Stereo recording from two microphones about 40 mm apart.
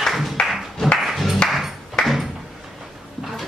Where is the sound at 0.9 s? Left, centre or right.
Centre.